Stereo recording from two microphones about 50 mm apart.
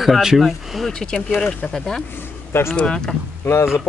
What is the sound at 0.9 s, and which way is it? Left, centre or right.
Speech, centre.